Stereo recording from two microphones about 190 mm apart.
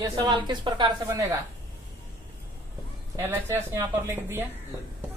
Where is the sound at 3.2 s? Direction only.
10° right (ahead or behind).